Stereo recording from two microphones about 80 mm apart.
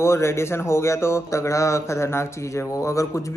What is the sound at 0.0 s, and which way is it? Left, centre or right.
Speech, left.